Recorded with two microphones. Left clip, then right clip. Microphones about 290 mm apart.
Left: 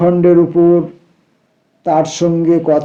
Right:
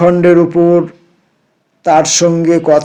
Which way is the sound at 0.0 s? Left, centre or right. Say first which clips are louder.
Right 2 dB; right.